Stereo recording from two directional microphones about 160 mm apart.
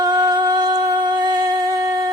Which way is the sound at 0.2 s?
25° right (ahead or behind).